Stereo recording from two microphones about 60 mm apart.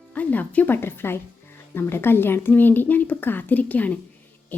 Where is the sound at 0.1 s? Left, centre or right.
Left.